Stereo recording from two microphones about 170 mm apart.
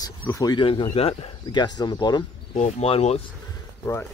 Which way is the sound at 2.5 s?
40° left (ahead or behind).